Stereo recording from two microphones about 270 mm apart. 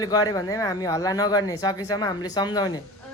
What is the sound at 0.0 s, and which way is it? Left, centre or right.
Speech, centre.